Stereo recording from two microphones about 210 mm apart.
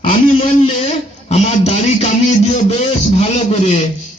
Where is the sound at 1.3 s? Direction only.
30° left (ahead or behind).